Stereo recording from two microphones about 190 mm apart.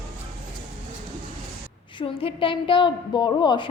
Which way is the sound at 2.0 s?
25° left (ahead or behind).